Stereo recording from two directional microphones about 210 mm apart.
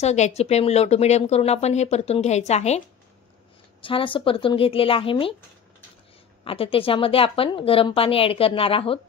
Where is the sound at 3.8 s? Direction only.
25° left (ahead or behind).